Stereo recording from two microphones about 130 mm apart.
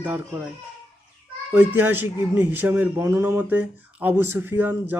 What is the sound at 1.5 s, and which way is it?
Speech, 15° right (ahead or behind).